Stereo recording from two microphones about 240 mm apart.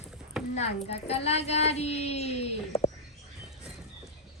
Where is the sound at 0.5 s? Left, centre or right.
Left.